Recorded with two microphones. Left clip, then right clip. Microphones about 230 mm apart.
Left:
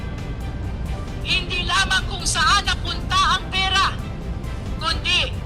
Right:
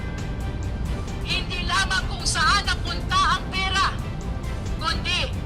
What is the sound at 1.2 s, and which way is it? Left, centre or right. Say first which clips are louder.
Vehicle: left 5 dB; centre.